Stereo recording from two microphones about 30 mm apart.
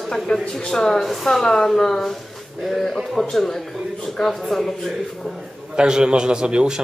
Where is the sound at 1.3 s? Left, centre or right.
Left.